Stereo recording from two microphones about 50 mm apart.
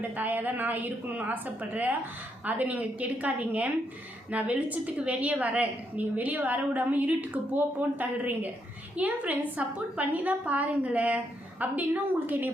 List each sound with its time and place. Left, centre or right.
0.2 s a woman's voice: right